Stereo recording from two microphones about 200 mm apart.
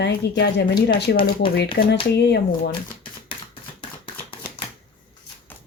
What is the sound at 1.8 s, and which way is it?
Speech, 65° left (ahead or behind).